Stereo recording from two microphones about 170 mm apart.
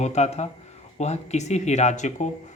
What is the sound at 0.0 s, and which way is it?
Speech, 40° left (ahead or behind).